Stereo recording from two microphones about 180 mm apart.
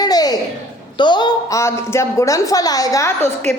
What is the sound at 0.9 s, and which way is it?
Speech, 25° left (ahead or behind).